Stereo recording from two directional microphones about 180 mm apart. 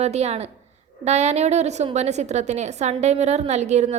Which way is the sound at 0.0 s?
35° right (ahead or behind).